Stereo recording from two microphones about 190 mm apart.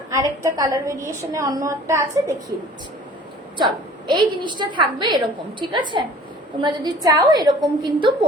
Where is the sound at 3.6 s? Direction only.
25° right (ahead or behind).